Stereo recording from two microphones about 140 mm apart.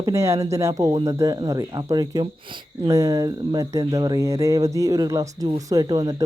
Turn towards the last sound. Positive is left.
turn(degrees=-25)  # may be behind; listen again after turning